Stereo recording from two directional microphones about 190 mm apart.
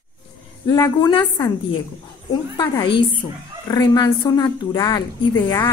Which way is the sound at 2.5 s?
25° left (ahead or behind).